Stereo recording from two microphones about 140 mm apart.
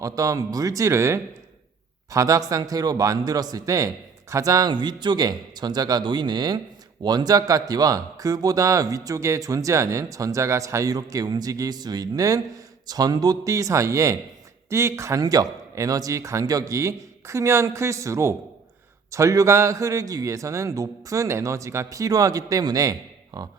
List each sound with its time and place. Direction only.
0.0 s speech: 25° right (ahead or behind)